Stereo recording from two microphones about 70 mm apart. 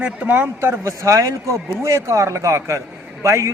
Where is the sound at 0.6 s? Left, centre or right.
Right.